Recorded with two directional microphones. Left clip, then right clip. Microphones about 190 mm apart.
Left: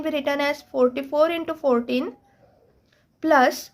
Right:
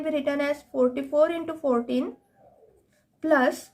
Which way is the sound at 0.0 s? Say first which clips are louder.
Left 3 dB; 30° left (ahead or behind).